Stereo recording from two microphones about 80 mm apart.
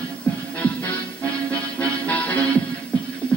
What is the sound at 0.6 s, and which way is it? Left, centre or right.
Music, centre.